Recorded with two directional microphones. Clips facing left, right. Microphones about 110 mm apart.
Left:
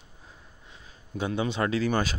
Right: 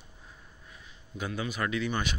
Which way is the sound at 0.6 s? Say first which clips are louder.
Left 2 dB; 30° left (ahead or behind).